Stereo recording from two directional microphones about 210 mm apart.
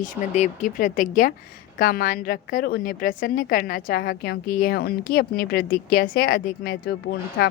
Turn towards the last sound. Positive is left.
turn(degrees=55)  # may be behind; listen again after turning